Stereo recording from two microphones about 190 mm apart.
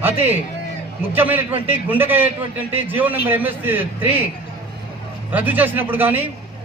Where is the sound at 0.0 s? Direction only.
10° right (ahead or behind).